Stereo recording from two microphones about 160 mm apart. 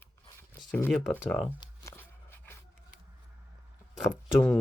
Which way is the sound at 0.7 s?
10° left (ahead or behind).